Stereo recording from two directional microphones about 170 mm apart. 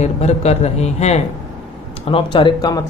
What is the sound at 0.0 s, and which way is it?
A man's voice, 40° left (ahead or behind).